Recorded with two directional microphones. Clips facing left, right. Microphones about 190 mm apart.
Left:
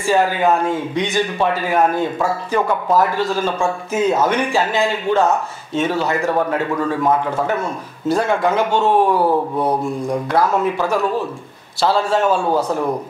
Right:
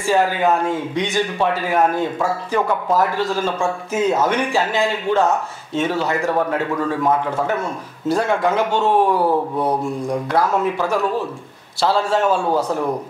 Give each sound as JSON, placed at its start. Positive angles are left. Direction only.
{"t": 0.0, "sound": "a man's voice", "side_deg": 10}
{"t": 9.2, "sound": "mantra", "side_deg": 30}
{"t": 10.3, "sound": "a man's voice", "side_deg": 10}
{"t": 12.4, "sound": "mantra", "side_deg": 25}